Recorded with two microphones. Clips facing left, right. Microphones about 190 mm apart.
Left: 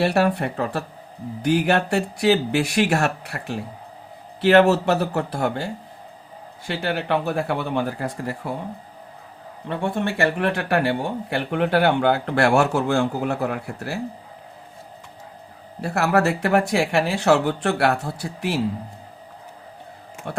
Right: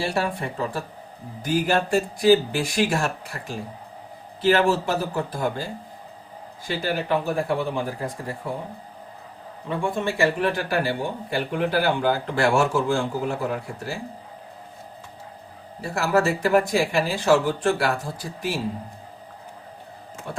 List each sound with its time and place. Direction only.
0.0 s speech: 65° left (ahead or behind)
6.7 s speech: 70° left (ahead or behind)
9.6 s speech: 65° left (ahead or behind)
15.8 s speech: 65° left (ahead or behind)